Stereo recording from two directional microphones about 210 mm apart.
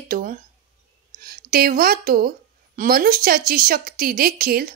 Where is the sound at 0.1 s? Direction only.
40° right (ahead or behind).